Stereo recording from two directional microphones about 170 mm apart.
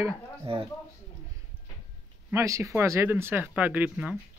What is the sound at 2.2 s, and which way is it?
Speech, 15° right (ahead or behind).